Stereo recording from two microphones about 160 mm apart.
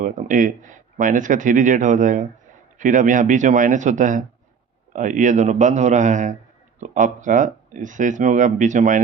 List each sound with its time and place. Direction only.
0.0 s speech: 55° right (ahead or behind)